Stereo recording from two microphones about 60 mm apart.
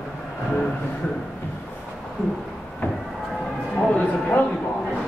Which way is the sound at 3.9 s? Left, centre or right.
Centre.